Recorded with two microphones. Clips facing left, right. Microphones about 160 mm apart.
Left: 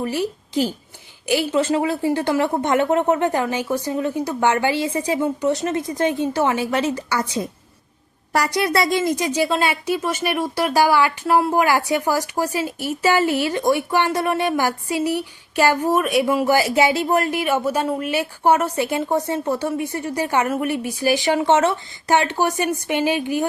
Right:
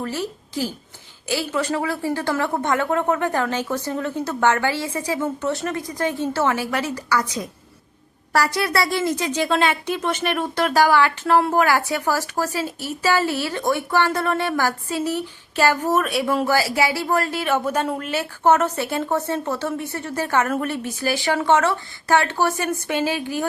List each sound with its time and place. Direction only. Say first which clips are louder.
0.0 s a woman's voice: left 4 dB; 15° left (ahead or behind)
16.6 s a woman's voice: left 3 dB; 20° left (ahead or behind)